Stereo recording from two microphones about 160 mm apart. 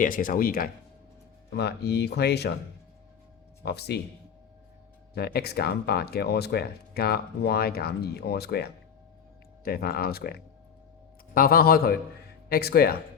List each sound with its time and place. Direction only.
0.0 s speech: 60° left (ahead or behind)
1.5 s speech: 90° left
3.6 s speech: 90° left
5.1 s speech: 85° left
9.6 s speech: 70° left (ahead or behind)